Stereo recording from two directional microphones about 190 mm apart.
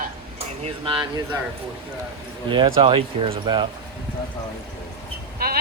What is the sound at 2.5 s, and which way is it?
Speech, 25° right (ahead or behind).